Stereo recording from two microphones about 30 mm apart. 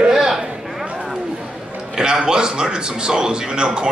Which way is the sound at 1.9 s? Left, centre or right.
Right.